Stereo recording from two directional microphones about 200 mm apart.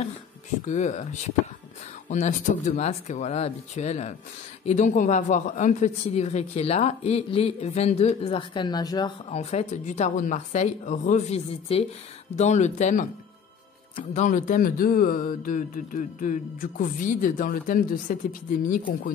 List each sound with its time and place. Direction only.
0.7 s speech: 35° left (ahead or behind)